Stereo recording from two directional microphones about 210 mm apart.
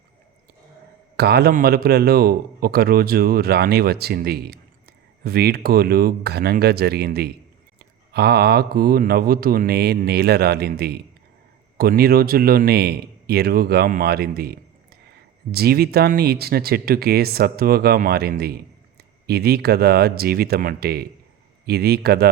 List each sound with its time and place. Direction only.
1.1 s a man's voice: 50° right (ahead or behind)